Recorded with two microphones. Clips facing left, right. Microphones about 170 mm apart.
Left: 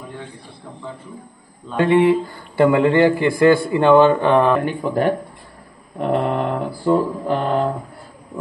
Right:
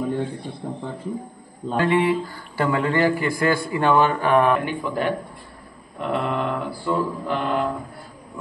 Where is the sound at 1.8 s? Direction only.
25° left (ahead or behind).